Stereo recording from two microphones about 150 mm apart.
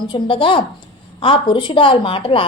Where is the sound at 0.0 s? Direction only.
35° left (ahead or behind).